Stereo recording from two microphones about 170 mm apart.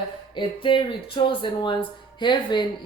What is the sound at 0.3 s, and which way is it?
Speech, 30° left (ahead or behind).